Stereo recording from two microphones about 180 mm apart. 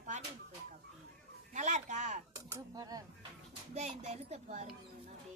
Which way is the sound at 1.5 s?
40° right (ahead or behind).